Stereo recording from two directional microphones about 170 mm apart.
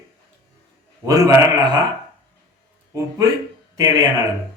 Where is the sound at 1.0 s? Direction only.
20° right (ahead or behind).